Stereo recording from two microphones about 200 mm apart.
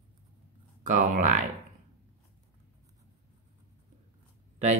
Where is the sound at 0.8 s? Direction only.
40° right (ahead or behind).